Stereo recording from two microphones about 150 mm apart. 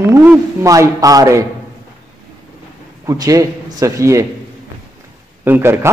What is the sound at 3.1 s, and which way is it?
A man's voice, 20° right (ahead or behind).